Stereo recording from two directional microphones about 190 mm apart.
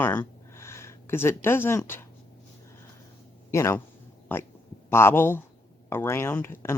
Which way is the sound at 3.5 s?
15° left (ahead or behind).